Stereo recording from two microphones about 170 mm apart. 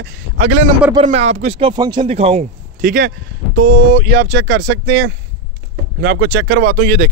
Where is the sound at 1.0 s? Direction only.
40° right (ahead or behind); by 2.1 s 25° right (ahead or behind).